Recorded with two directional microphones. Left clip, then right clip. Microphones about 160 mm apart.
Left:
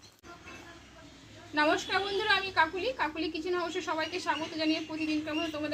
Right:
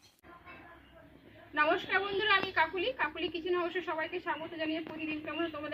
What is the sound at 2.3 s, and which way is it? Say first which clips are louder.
A woman's voice: left 2 dB; 5° right (ahead or behind).